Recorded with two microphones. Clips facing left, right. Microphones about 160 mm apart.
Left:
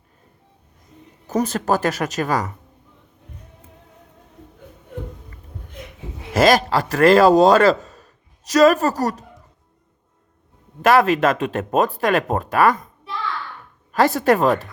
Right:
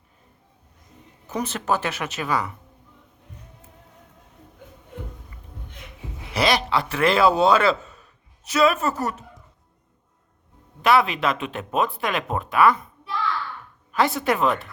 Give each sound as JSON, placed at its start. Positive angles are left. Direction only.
{"t": 1.3, "sound": "speech", "side_deg": 40}
{"t": 6.3, "sound": "a man's voice", "side_deg": 45}
{"t": 10.8, "sound": "speech", "side_deg": 45}
{"t": 13.9, "sound": "speech", "side_deg": 40}